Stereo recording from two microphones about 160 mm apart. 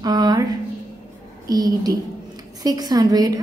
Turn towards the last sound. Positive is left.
turn(degrees=-25)  # may be behind; listen again after turning